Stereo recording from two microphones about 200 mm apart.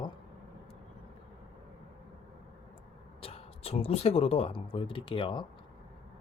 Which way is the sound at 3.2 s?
30° left (ahead or behind).